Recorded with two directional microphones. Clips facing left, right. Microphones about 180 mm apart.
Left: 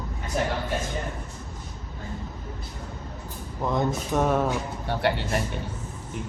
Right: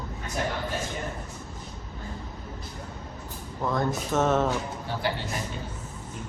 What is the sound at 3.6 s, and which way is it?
Speech, 15° left (ahead or behind).